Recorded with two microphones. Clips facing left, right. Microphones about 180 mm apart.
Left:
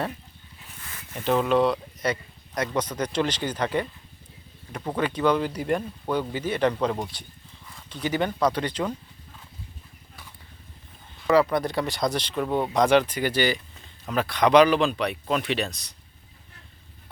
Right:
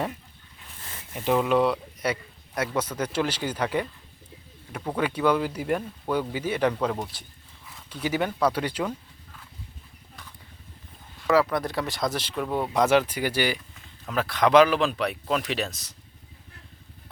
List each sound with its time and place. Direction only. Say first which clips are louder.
1.1 s speech: even; 10° right (ahead or behind)
11.3 s speech: left 2 dB; centre (ahead or behind)